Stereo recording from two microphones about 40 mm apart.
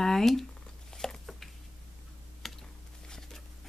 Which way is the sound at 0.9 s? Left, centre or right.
Centre.